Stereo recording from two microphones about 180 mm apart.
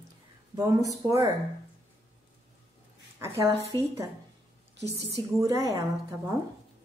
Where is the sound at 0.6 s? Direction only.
20° right (ahead or behind).